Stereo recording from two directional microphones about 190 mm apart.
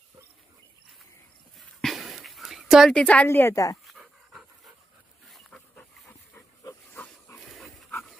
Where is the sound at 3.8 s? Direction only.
Centre (ahead or behind).